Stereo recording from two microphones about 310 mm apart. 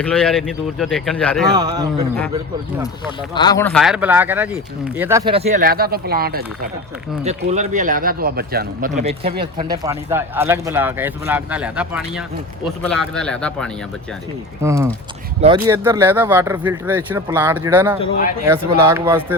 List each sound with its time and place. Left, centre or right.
0.0 s speech: centre
1.5 s speech: centre
3.3 s speech: centre
14.6 s speech: centre
18.0 s speech: left
18.4 s speech: centre